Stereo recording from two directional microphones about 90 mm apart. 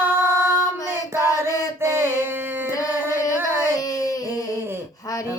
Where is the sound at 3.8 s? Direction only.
40° left (ahead or behind).